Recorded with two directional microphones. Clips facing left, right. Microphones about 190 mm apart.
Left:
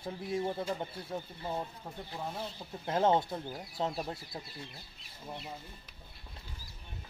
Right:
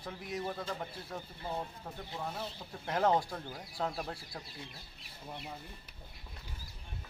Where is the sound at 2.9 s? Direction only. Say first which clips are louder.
Left 2 dB; 25° left (ahead or behind).